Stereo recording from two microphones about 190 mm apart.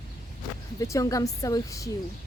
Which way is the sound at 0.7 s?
15° left (ahead or behind).